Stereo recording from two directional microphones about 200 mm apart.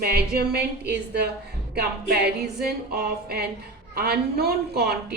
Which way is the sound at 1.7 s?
50° right (ahead or behind).